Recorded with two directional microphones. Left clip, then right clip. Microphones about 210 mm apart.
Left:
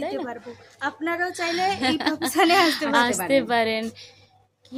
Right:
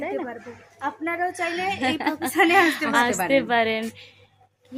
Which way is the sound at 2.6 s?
15° left (ahead or behind).